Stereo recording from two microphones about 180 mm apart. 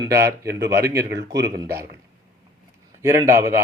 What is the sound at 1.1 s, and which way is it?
Speech, 75° right (ahead or behind).